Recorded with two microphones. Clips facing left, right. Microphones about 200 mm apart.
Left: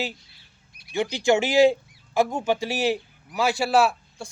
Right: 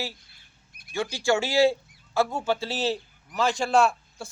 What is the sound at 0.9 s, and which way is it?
Speech, 20° left (ahead or behind).